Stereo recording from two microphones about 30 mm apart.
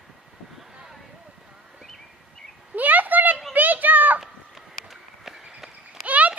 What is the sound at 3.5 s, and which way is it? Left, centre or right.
Children playing, right.